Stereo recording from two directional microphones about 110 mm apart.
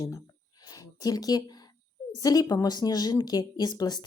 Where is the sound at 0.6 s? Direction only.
35° left (ahead or behind).